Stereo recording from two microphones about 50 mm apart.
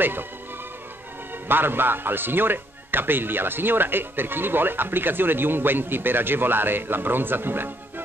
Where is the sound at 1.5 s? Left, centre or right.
Right.